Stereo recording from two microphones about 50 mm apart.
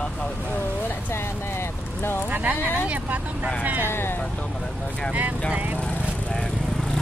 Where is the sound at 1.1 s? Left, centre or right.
Left.